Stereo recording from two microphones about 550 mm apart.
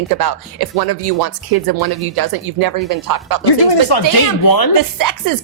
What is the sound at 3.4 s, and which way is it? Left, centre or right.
Speech, left.